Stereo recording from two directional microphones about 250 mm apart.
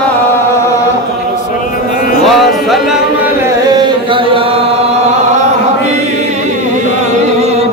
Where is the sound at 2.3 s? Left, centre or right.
Centre.